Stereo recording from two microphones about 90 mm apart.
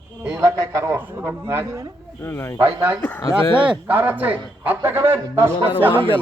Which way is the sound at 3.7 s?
20° right (ahead or behind).